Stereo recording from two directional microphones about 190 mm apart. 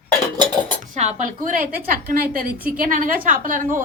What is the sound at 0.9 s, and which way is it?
Speech, 40° right (ahead or behind).